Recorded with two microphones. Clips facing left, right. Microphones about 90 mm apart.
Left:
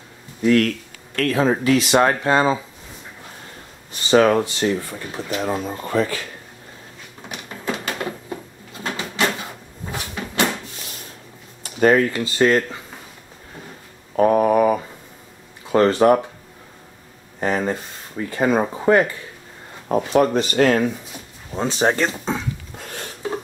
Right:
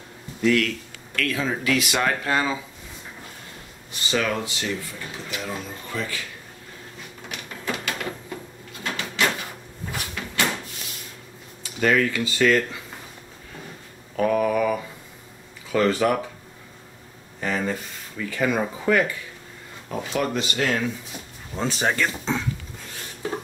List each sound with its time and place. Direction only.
0.4 s speech: 35° left (ahead or behind)
4.1 s speech: 40° left (ahead or behind)
7.2 s a sound: 25° left (ahead or behind)
11.6 s speech: 35° left (ahead or behind)
14.1 s mantra: 35° left (ahead or behind)
15.7 s speech: 40° left (ahead or behind)
17.4 s speech: 35° left (ahead or behind)
21.5 s speech: 25° left (ahead or behind)
22.8 s dishes: 55° left (ahead or behind)